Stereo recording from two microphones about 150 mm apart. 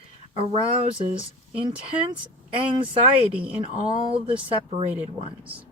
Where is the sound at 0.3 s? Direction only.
40° right (ahead or behind).